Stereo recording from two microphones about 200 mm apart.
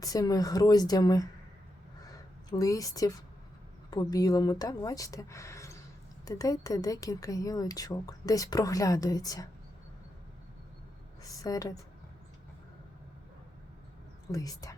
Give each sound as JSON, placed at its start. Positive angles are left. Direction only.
{"t": 0.0, "sound": "speech", "side_deg": 20}
{"t": 2.0, "sound": "a sound", "side_deg": 15}
{"t": 3.8, "sound": "speech", "side_deg": 20}
{"t": 11.2, "sound": "speech", "side_deg": 15}
{"t": 14.3, "sound": "speech", "side_deg": 15}